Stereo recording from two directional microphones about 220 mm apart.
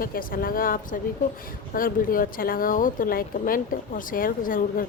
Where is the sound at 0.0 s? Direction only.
40° left (ahead or behind).